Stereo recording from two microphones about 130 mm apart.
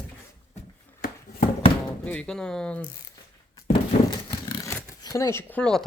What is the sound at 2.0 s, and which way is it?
Speech, 10° left (ahead or behind).